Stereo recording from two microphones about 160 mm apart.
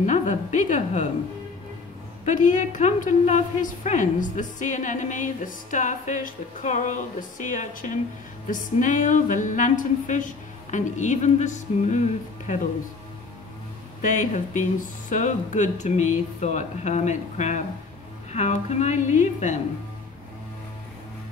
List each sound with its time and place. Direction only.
0.0 s a woman's voice: 50° left (ahead or behind)
2.2 s a woman's voice: 50° left (ahead or behind)
14.0 s a woman's voice: 50° left (ahead or behind)